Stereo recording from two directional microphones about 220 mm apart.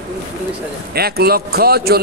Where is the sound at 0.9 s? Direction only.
45° right (ahead or behind).